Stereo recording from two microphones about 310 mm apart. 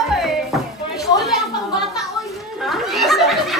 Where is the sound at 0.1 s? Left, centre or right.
Centre.